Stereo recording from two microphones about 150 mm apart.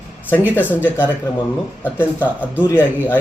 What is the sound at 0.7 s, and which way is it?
Speech, 15° left (ahead or behind).